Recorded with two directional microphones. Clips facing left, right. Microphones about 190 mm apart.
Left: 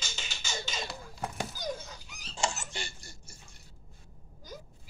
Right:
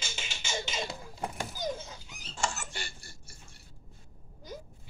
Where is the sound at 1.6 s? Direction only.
25° right (ahead or behind).